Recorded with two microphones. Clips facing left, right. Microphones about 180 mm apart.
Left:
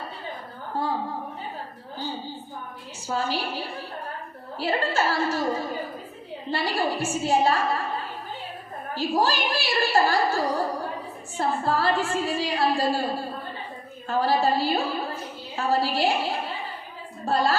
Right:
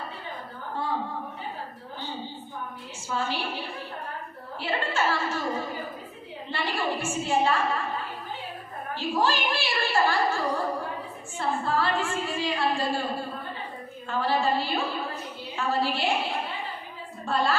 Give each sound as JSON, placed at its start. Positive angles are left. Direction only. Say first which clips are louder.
{"t": 0.8, "sound": "a woman's voice", "louder": "left 4 dB", "side_deg": 40}
{"t": 3.1, "sound": "a woman's voice", "louder": "left 3 dB", "side_deg": 40}
{"t": 9.0, "sound": "a woman's voice", "louder": "left 2 dB", "side_deg": 40}
{"t": 14.1, "sound": "a woman's voice", "louder": "left 3 dB", "side_deg": 40}